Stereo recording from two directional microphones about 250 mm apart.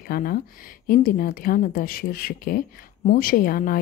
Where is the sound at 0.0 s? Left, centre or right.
Left.